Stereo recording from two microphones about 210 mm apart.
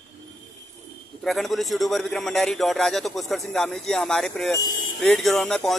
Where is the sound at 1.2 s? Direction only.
Centre (ahead or behind).